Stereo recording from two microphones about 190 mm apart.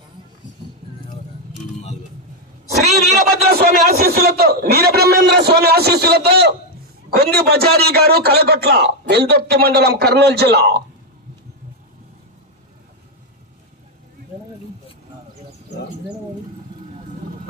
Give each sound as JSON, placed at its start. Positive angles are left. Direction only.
{"t": 3.3, "sound": "a man's voice", "side_deg": -55}